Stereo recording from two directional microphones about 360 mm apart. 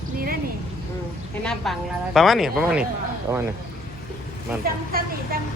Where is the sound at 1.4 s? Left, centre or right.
Centre.